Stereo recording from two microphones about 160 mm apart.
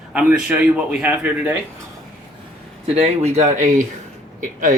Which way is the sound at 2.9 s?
40° right (ahead or behind).